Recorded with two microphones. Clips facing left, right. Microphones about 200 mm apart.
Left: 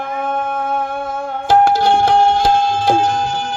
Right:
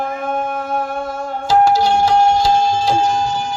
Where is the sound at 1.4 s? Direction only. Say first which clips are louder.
Left 1 dB; 55° left (ahead or behind).